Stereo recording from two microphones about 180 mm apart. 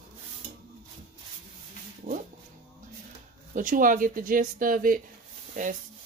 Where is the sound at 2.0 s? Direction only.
40° right (ahead or behind).